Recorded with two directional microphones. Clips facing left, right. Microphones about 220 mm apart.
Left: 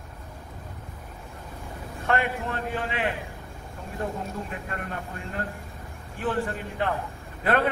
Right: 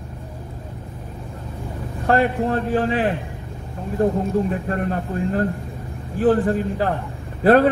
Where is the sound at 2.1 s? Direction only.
35° right (ahead or behind).